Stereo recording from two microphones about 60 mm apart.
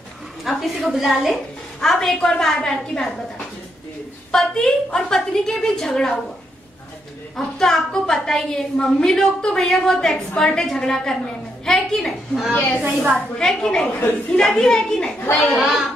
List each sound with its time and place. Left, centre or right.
0.4 s a woman's voice: centre
4.3 s a woman's voice: centre
7.3 s a woman's voice: centre
12.8 s a woman's voice: right
13.4 s a woman's voice: centre
15.5 s speech: centre